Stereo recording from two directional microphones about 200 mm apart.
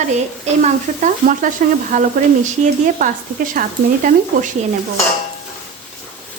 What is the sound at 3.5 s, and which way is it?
A woman's voice, 40° right (ahead or behind).